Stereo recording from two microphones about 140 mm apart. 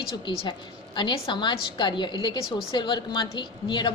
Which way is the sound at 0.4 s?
35° left (ahead or behind).